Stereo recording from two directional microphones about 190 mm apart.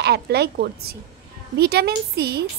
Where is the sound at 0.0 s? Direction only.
60° right (ahead or behind).